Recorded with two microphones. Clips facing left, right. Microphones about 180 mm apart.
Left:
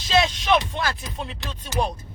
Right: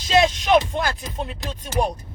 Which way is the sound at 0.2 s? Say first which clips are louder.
Right 4 dB; 45° right (ahead or behind).